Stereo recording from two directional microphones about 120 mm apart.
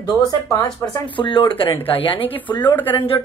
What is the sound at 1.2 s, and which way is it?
A woman's voice, 45° left (ahead or behind).